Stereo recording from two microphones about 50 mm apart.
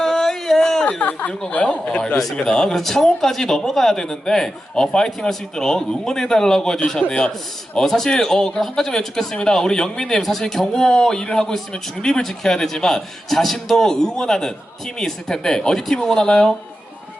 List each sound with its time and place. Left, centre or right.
0.0 s a sound: centre
0.9 s a man's voice: left
2.3 s a man's voice: centre